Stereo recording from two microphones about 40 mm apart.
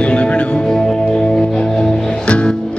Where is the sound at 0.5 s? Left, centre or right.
Centre.